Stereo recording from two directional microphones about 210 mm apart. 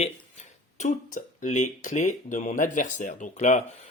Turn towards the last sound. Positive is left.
turn(degrees=35)  # may be behind; listen again after turning